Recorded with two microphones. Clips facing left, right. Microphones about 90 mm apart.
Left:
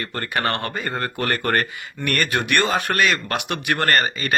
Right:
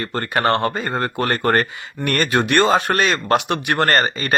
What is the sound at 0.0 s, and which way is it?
Speech, 30° right (ahead or behind).